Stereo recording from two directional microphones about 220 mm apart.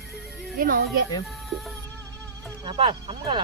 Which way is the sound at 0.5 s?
45° right (ahead or behind).